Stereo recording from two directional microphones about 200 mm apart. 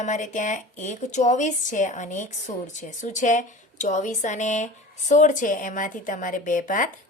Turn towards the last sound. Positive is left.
turn(degrees=40)  # may be behind; listen again after turning